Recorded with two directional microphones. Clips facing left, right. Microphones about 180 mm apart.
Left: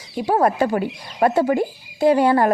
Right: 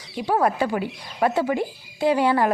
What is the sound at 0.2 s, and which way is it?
Speech, 40° left (ahead or behind).